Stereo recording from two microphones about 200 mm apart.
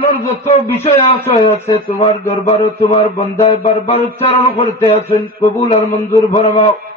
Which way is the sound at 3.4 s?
30° left (ahead or behind).